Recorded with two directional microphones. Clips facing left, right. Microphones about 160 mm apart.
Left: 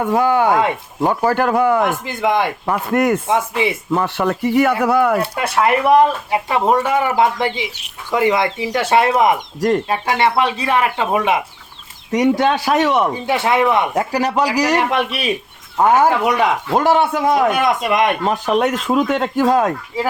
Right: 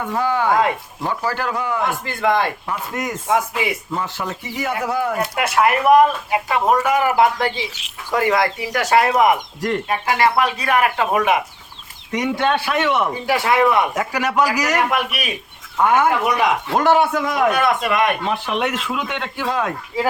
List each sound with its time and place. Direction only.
0.0 s a man's voice: 50° left (ahead or behind)
2.0 s a man's voice: 20° left (ahead or behind)
2.6 s speech: 60° left (ahead or behind)
3.2 s speech: 25° left (ahead or behind)
3.9 s speech: 65° left (ahead or behind)
5.2 s speech: 30° left (ahead or behind)
9.6 s speech: 40° left (ahead or behind)
10.2 s speech: 25° left (ahead or behind)
12.1 s speech: 40° left (ahead or behind)
13.2 s speech: 25° left (ahead or behind)
13.9 s speech: 35° left (ahead or behind)